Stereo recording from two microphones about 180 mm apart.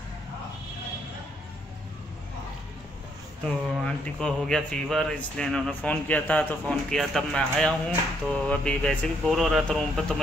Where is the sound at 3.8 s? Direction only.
5° left (ahead or behind).